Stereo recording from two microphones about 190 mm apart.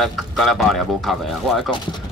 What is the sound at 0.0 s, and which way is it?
Speech, centre (ahead or behind).